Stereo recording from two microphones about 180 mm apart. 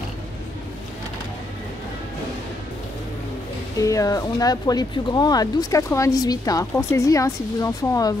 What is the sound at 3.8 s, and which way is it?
Speech, 20° left (ahead or behind).